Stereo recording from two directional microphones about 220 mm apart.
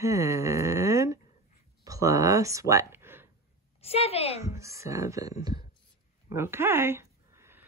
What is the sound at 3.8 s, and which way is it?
Speech, 25° left (ahead or behind).